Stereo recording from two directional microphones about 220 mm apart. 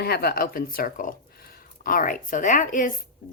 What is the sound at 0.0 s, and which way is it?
Speech, 45° left (ahead or behind).